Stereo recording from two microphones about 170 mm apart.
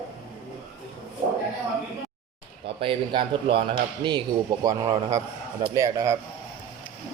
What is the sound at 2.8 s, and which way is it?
A man's voice, 30° right (ahead or behind).